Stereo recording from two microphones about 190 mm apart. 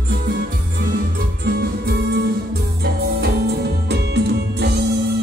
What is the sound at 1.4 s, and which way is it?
Music, 60° right (ahead or behind).